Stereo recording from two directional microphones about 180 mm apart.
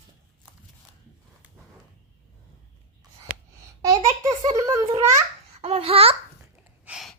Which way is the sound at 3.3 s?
60° right (ahead or behind).